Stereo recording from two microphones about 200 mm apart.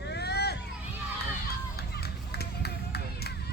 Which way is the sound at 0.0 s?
55° left (ahead or behind).